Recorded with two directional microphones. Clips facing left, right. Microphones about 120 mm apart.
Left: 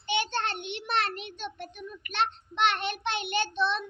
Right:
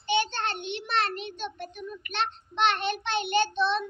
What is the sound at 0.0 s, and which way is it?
Child singing, 30° right (ahead or behind).